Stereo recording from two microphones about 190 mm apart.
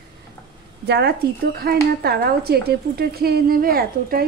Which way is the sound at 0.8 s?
60° right (ahead or behind).